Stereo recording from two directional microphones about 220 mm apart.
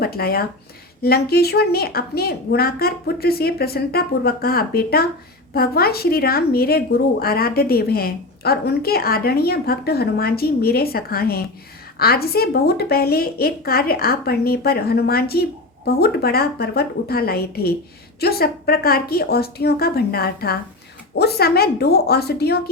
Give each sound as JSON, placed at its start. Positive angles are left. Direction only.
{"t": 0.0, "sound": "a woman's voice", "side_deg": 45}